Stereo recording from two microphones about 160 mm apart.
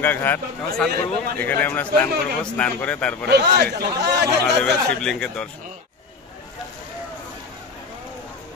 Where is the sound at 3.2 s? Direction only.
90° right.